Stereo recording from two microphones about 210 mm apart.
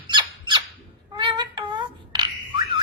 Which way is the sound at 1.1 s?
20° right (ahead or behind).